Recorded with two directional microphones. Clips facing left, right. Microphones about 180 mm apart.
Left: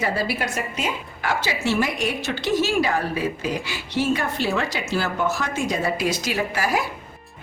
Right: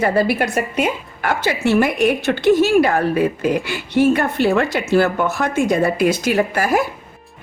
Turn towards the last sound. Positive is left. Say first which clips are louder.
# right 6 dB
turn(degrees=-50)  # may be behind; listen again after turning